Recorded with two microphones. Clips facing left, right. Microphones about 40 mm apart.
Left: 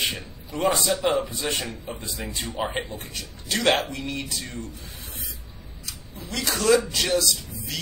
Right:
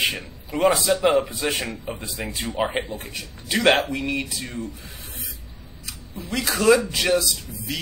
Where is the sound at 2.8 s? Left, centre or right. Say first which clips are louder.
Right 2 dB; centre.